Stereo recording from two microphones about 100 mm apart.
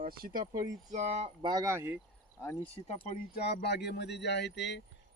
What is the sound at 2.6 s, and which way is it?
Speech, 90° left.